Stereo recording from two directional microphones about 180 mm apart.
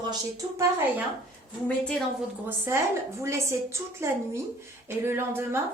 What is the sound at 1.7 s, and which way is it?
Speech, 5° left (ahead or behind).